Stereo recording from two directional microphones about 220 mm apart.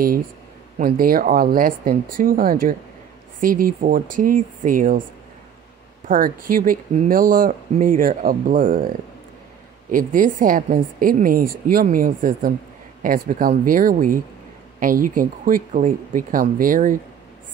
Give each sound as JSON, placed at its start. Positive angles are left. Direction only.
{"t": 0.7, "sound": "speech", "side_deg": -40}
{"t": 6.0, "sound": "speech", "side_deg": -40}